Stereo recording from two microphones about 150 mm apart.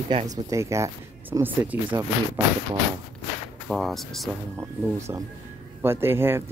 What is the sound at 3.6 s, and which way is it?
Speech, centre (ahead or behind).